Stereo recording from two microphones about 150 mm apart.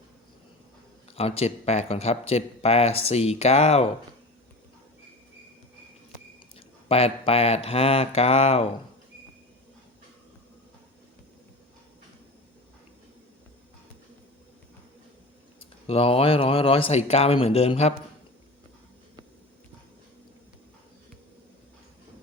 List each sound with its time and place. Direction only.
1.1 s speech: 40° left (ahead or behind)
6.8 s speech: 40° left (ahead or behind)
15.9 s speech: 40° left (ahead or behind)